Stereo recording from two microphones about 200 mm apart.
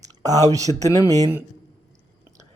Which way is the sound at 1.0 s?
15° right (ahead or behind).